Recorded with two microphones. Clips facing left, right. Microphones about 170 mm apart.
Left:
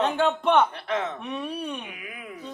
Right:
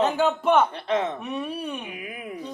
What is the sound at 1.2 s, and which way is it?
Speech, 5° right (ahead or behind).